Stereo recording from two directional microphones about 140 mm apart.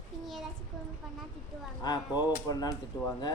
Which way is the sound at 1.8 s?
30° left (ahead or behind).